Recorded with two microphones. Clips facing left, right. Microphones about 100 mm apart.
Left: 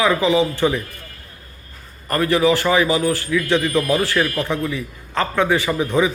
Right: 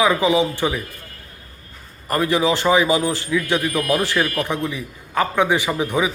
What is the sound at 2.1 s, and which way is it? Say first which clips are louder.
Speech: left 2 dB; 15° right (ahead or behind).